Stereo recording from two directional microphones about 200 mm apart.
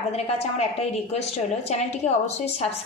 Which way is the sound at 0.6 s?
30° left (ahead or behind).